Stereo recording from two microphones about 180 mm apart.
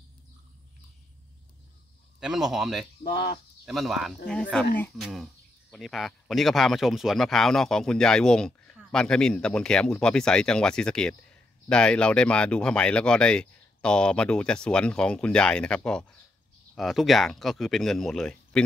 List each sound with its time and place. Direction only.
2.1 s speech: 5° right (ahead or behind)
3.0 s speech: 55° left (ahead or behind)
3.6 s speech: centre (ahead or behind)